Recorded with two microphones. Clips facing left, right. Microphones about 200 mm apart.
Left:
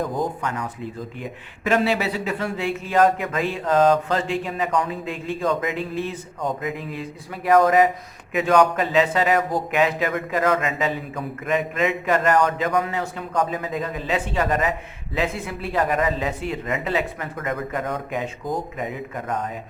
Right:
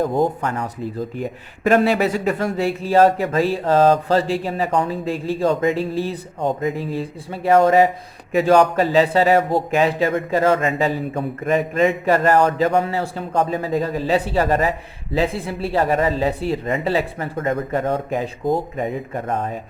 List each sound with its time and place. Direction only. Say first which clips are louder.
0.0 s speech: right 6 dB; 30° right (ahead or behind)
1.1 s a man's voice: right 6 dB; 40° right (ahead or behind)